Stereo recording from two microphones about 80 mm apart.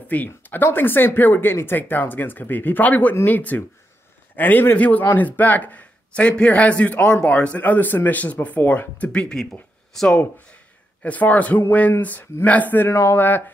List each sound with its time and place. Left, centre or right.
0.1 s a man's voice: left; by 10.2 s centre
11.0 s a man's voice: centre